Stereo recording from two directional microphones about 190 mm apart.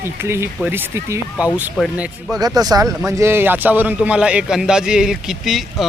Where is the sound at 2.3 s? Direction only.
20° right (ahead or behind); by 5.8 s centre (ahead or behind).